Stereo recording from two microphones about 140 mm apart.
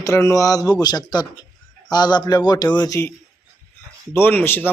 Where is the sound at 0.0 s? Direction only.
20° left (ahead or behind).